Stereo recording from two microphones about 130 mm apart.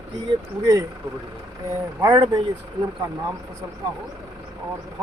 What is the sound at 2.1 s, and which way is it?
Speech, 40° right (ahead or behind).